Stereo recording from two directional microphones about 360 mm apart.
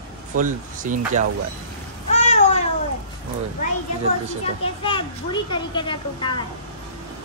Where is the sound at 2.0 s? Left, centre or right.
Centre.